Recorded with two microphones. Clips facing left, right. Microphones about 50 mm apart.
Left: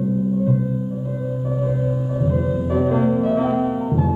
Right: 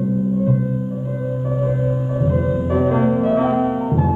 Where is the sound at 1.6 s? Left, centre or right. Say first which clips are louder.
Right 2 dB; right.